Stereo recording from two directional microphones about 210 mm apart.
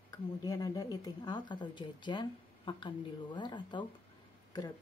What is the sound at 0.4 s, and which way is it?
Speech, 20° left (ahead or behind).